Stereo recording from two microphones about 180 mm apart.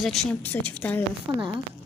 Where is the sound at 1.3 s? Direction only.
25° right (ahead or behind).